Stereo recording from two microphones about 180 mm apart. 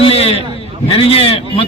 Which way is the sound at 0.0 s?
30° left (ahead or behind).